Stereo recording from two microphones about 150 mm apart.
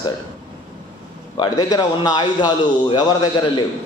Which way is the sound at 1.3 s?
30° left (ahead or behind).